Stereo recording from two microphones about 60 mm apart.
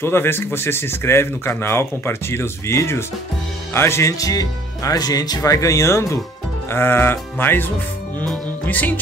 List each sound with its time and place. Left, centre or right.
0.0 s speech: left
4.2 s speech: left
6.7 s speech: left
8.6 s music: left